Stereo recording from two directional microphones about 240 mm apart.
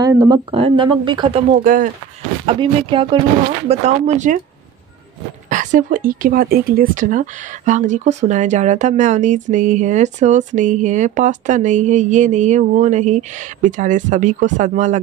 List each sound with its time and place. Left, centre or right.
0.0 s speech: centre; by 1.9 s right
2.4 s speech: right
5.5 s speech: right